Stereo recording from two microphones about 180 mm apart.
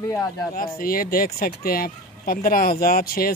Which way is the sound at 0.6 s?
55° left (ahead or behind).